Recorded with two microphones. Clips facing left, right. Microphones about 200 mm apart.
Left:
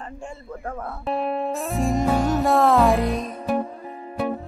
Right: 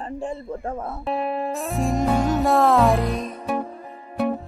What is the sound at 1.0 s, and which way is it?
Music, centre (ahead or behind).